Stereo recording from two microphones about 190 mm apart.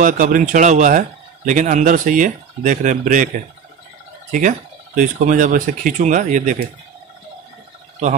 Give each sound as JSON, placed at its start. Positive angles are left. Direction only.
{"t": 0.0, "sound": "a man's voice", "side_deg": -45}
{"t": 4.3, "sound": "a man's voice", "side_deg": -40}